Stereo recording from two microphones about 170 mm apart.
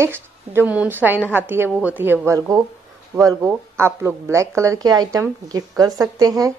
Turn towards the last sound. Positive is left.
turn(degrees=-20)  # may be behind; listen again after turning